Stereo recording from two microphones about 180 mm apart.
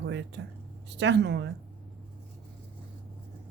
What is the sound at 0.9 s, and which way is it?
Speech, 75° right (ahead or behind).